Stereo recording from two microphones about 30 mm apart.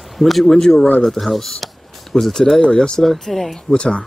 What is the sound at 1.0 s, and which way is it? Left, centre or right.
Speech, centre.